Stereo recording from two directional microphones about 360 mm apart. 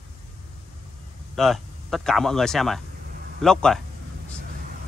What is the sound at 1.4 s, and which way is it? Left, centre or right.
Speech, centre.